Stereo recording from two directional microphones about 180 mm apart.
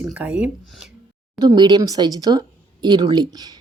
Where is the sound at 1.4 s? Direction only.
25° right (ahead or behind).